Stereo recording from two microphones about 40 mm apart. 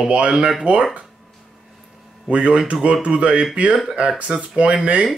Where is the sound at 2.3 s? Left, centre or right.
Right.